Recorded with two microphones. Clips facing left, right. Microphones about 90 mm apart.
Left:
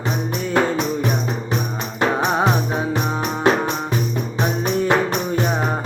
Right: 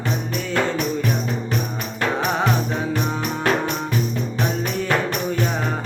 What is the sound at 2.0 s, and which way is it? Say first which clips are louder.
Music: left 3 dB; 20° left (ahead or behind).